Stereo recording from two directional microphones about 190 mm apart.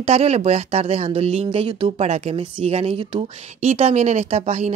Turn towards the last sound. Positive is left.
turn(degrees=-35)  # may be behind; listen again after turning